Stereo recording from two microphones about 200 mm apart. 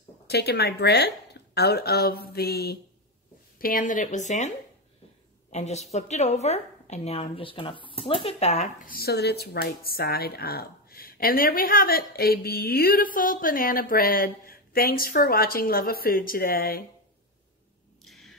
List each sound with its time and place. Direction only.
0.3 s a woman's voice: 55° left (ahead or behind); by 4.5 s 35° left (ahead or behind)
5.5 s a woman's voice: 35° left (ahead or behind)
18.0 s a sound: centre (ahead or behind)